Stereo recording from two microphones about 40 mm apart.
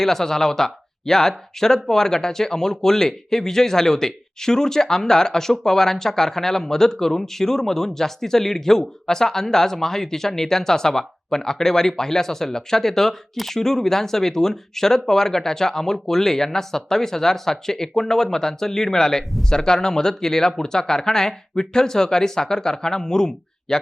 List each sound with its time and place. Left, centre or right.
0.0 s speech: centre